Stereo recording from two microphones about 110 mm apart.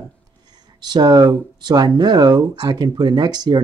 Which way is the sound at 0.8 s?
40° right (ahead or behind).